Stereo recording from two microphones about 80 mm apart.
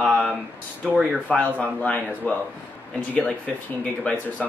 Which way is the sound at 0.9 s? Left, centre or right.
Centre.